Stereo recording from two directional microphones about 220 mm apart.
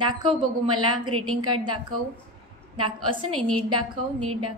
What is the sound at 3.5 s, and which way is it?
Speech, 80° right.